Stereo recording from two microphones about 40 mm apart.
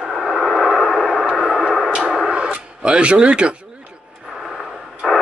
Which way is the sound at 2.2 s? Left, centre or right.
Right.